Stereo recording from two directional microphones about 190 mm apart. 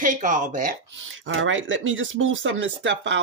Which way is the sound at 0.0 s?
40° right (ahead or behind).